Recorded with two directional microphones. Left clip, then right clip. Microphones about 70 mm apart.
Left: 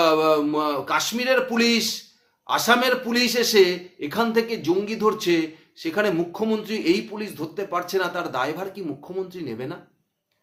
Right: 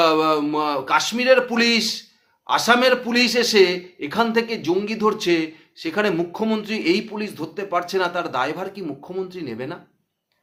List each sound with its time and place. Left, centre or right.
0.0 s speech: right